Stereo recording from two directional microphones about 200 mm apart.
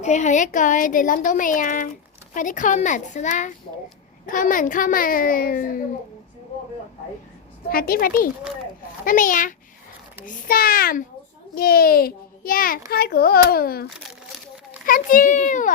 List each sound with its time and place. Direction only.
0.0 s a woman's voice: 35° left (ahead or behind)
7.7 s a woman's voice: 50° left (ahead or behind)
14.8 s speech: 45° left (ahead or behind)